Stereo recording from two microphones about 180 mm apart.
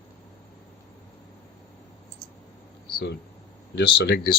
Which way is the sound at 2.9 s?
65° left (ahead or behind).